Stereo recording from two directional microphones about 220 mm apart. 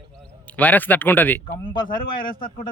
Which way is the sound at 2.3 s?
40° left (ahead or behind).